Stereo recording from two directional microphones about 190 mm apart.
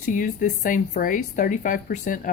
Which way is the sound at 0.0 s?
45° left (ahead or behind).